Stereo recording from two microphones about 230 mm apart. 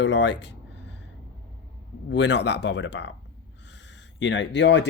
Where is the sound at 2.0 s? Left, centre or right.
Left.